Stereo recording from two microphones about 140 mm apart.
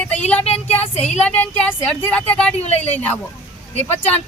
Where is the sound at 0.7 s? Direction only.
10° left (ahead or behind).